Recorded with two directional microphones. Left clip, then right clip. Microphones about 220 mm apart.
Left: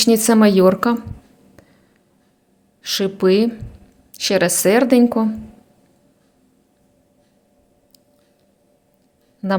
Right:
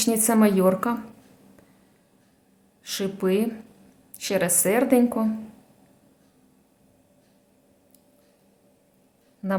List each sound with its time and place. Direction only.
0.0 s a woman's voice: 20° left (ahead or behind)
2.8 s a woman's voice: 20° left (ahead or behind)